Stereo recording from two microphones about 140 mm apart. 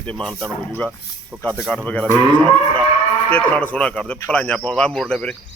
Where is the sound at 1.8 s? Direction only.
10° left (ahead or behind).